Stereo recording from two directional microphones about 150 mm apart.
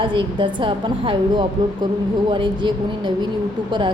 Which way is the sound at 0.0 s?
35° right (ahead or behind).